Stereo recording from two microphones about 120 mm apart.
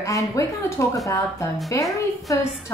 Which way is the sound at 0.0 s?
25° left (ahead or behind).